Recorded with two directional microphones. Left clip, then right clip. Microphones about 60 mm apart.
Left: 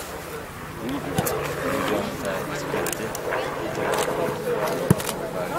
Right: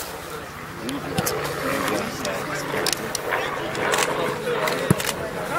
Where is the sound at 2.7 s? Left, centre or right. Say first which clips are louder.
Right 2 dB; right.